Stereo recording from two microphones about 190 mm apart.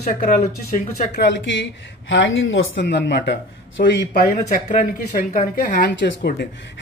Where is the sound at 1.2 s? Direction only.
70° left (ahead or behind).